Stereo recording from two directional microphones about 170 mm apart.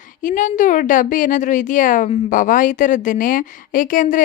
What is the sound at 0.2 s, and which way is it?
A woman's voice, 50° left (ahead or behind).